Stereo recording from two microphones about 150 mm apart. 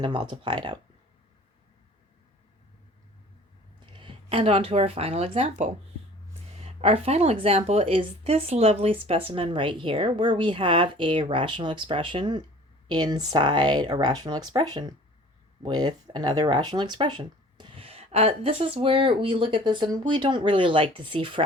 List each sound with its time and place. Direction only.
0.0 s speech: 35° right (ahead or behind)
3.9 s speech: 35° right (ahead or behind)
6.6 s speech: 40° right (ahead or behind)